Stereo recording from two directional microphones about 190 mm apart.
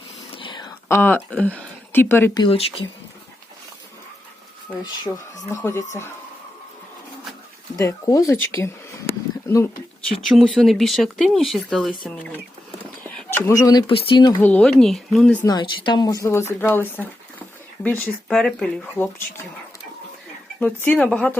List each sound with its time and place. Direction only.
0.3 s whispering: 25° left (ahead or behind)
0.9 s speech: 10° left (ahead or behind)
2.4 s speech: 30° left (ahead or behind)
4.8 s speech: 20° left (ahead or behind)
7.8 s speech: 20° left (ahead or behind)
10.2 s speech: centre (ahead or behind); by 14.3 s 25° left (ahead or behind)
14.4 s speech: 5° left (ahead or behind)
15.4 s speech: 25° left (ahead or behind); by 19.0 s 5° left (ahead or behind)
20.6 s speech: 5° left (ahead or behind)